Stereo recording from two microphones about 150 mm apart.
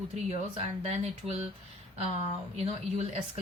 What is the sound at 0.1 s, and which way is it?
Speech, 45° right (ahead or behind).